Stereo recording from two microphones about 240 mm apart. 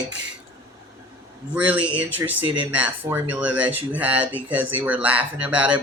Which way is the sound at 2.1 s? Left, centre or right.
Centre.